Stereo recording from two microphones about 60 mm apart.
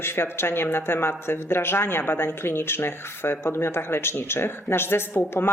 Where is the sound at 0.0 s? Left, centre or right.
Left.